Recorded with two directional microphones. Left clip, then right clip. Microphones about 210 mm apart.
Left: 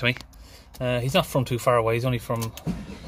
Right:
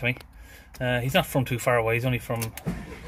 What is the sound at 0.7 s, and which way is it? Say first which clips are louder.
Speech: left 1 dB; 5° left (ahead or behind).